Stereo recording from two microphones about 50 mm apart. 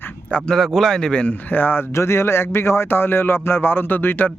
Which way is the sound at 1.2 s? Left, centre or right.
Left.